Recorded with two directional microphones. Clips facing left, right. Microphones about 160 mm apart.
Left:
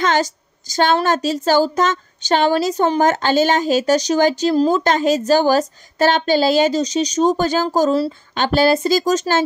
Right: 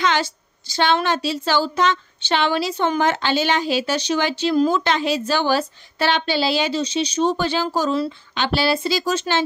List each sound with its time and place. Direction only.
0.0 s speech: 45° left (ahead or behind)